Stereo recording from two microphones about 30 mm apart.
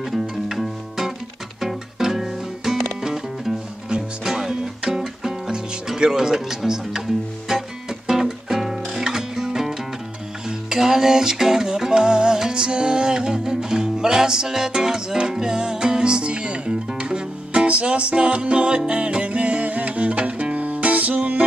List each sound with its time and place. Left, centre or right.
0.0 s music: centre
2.1 s music: centre; by 21.5 s right